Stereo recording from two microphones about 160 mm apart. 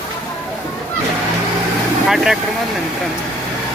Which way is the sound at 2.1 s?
Centre (ahead or behind).